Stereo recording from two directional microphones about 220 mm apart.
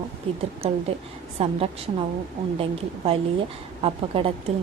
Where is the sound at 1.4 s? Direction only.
25° right (ahead or behind).